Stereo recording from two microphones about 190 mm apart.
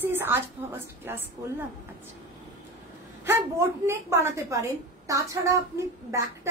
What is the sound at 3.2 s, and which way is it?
A woman's voice, 15° right (ahead or behind).